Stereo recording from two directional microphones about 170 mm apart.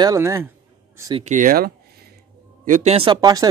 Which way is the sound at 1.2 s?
50° right (ahead or behind).